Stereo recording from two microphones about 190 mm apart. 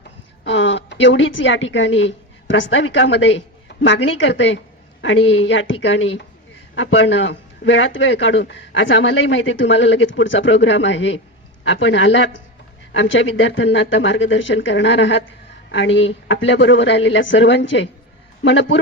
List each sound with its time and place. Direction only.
0.4 s a woman's voice: 70° left (ahead or behind)